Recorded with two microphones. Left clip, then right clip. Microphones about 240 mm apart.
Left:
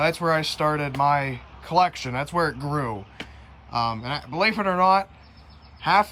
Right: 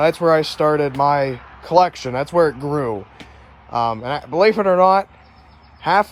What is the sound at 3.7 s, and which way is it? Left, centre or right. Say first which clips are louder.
Speech: right 6 dB; centre.